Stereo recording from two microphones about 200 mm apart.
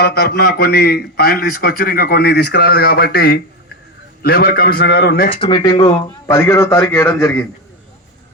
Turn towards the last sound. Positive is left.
turn(degrees=10)  # may be behind; listen again after turning